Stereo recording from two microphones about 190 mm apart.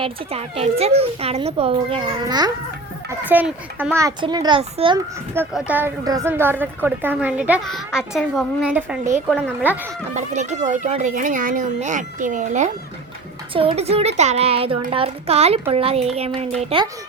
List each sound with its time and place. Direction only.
0.0 s speech: 30° right (ahead or behind)
3.1 s a child's voice: 10° right (ahead or behind)
3.9 s a child's voice: 20° right (ahead or behind)
5.3 s a child's voice: 10° right (ahead or behind)
10.2 s speech: 40° right (ahead or behind)